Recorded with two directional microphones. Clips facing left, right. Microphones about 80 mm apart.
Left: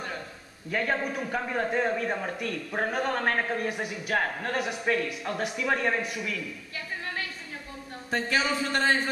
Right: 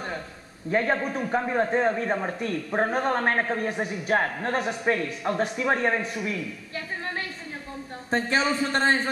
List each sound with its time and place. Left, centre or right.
0.7 s a man's voice: right
8.1 s a man's voice: right